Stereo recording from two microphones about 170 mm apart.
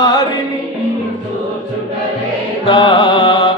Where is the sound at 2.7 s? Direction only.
30° left (ahead or behind).